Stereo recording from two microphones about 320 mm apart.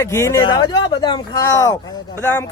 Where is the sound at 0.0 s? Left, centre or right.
Centre.